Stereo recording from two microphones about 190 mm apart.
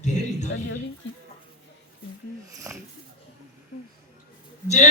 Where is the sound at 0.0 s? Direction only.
40° left (ahead or behind).